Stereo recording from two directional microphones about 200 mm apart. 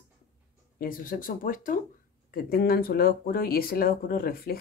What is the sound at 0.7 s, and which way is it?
Speech, 45° left (ahead or behind).